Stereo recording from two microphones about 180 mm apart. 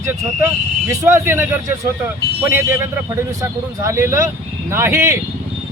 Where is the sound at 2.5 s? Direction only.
15° right (ahead or behind).